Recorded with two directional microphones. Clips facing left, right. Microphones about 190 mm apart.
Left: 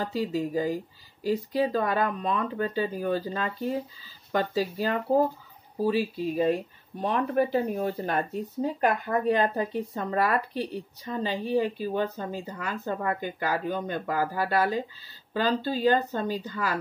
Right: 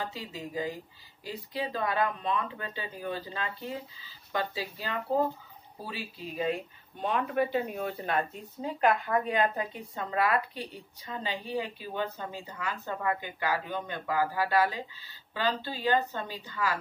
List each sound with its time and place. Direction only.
0.0 s speech: 40° left (ahead or behind)
9.2 s speech: 40° left (ahead or behind)